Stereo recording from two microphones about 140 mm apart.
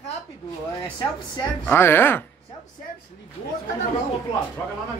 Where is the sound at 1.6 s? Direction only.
15° left (ahead or behind).